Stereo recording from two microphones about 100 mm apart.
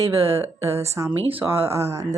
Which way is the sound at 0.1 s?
25° right (ahead or behind).